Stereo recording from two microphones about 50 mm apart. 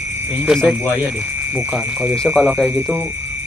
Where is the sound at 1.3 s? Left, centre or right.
Right.